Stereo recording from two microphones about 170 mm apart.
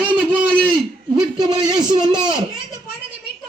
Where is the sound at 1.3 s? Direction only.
25° right (ahead or behind).